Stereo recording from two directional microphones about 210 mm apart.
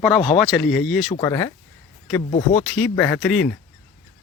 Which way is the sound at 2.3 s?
30° left (ahead or behind).